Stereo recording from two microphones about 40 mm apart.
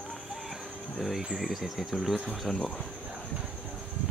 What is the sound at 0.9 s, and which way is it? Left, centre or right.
Speech, centre.